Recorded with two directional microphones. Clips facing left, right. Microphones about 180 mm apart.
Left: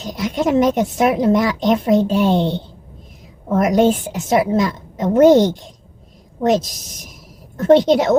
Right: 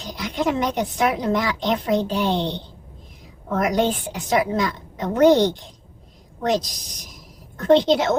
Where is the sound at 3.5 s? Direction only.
20° left (ahead or behind).